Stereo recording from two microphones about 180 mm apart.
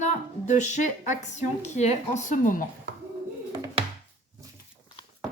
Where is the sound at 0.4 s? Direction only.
40° left (ahead or behind).